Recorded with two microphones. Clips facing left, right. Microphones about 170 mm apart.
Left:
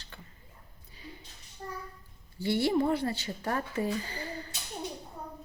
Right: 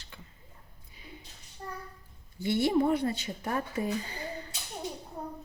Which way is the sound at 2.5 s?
20° right (ahead or behind).